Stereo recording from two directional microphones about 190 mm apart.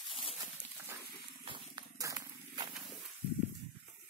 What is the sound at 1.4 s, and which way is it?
Purr, 25° right (ahead or behind).